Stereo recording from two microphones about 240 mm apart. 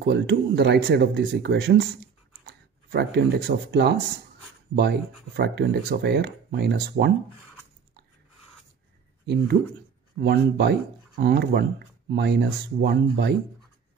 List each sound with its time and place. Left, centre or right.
0.0 s speech: right
9.2 s speech: right